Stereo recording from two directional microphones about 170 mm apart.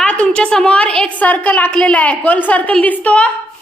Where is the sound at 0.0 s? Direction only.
5° left (ahead or behind).